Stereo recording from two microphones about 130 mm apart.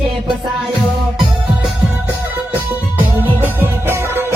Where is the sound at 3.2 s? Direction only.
15° right (ahead or behind).